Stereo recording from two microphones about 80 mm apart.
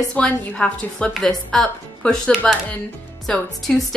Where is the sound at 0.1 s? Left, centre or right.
Centre.